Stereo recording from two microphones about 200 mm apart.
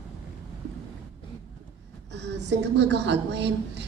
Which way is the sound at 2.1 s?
60° right (ahead or behind).